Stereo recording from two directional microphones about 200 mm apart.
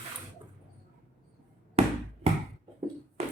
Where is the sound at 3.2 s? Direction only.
30° right (ahead or behind).